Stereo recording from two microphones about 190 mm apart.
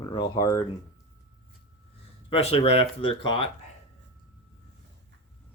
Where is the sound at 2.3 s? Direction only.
30° left (ahead or behind).